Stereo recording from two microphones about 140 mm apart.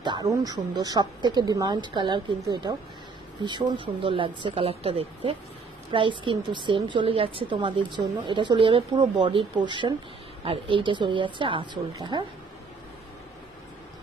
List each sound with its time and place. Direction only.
0.0 s a woman's voice: 30° right (ahead or behind)